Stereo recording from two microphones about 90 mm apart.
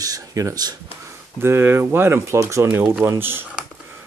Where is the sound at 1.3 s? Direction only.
25° right (ahead or behind).